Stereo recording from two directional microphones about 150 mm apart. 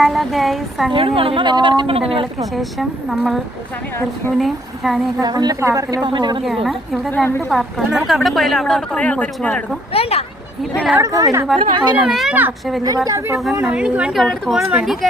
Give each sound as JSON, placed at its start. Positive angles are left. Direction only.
{"t": 0.0, "sound": "a woman's voice", "side_deg": 0}
{"t": 0.9, "sound": "speech", "side_deg": -40}
{"t": 2.4, "sound": "a woman's voice", "side_deg": 0}
{"t": 5.2, "sound": "a woman's voice", "side_deg": -25}
{"t": 6.4, "sound": "a woman's voice", "side_deg": 0}
{"t": 7.1, "sound": "a woman's voice", "side_deg": 15}
{"t": 7.5, "sound": "a woman's voice", "side_deg": 0}
{"t": 9.9, "sound": "speech", "side_deg": 40}
{"t": 10.6, "sound": "a woman's voice", "side_deg": 0}
{"t": 10.9, "sound": "a woman's voice", "side_deg": -20}
{"t": 11.8, "sound": "a woman's voice", "side_deg": -5}
{"t": 13.1, "sound": "a woman's voice", "side_deg": -20}
{"t": 13.6, "sound": "a woman's voice", "side_deg": -5}